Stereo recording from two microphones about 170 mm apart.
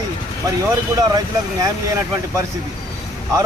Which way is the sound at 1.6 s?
15° right (ahead or behind).